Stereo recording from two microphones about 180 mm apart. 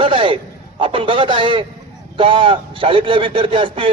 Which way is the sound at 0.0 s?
30° right (ahead or behind).